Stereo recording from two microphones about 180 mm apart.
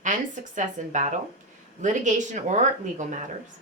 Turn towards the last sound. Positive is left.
turn(degrees=-40)  # may be behind; listen again after turning